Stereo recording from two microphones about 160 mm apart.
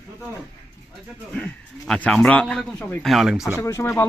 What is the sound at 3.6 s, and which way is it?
Speech, 20° left (ahead or behind).